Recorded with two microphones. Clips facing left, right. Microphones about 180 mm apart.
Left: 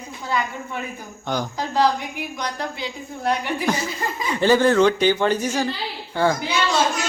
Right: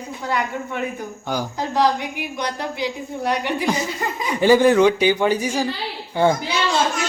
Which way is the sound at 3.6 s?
15° right (ahead or behind).